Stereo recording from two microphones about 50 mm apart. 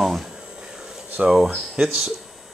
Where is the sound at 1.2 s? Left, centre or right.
Centre.